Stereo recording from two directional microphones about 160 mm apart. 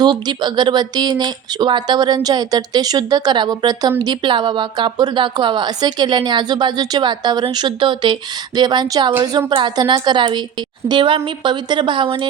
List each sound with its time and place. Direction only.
0.0 s a woman's voice: 25° right (ahead or behind)